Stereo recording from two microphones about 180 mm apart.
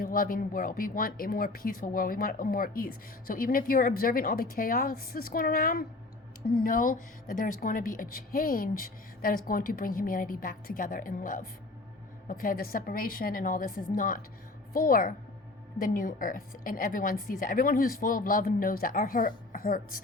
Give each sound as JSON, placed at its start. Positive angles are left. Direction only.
{"t": 0.0, "sound": "a woman's voice", "side_deg": 50}